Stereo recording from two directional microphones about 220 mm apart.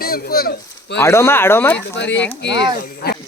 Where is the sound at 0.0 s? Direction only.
45° left (ahead or behind).